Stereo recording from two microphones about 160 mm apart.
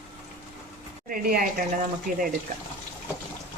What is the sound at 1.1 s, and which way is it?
Speech, 65° right (ahead or behind).